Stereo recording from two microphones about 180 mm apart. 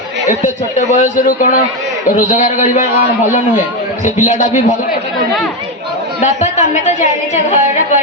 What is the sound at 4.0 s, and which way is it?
Speech, 45° left (ahead or behind).